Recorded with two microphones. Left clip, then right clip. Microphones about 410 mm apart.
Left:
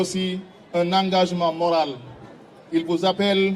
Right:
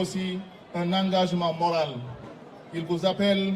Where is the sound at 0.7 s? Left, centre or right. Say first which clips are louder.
Left 6 dB; left.